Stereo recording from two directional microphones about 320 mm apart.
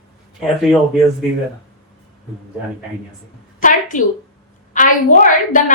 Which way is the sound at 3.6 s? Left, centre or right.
Left.